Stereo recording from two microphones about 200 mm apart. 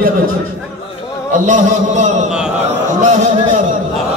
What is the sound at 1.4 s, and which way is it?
Speech, 35° right (ahead or behind).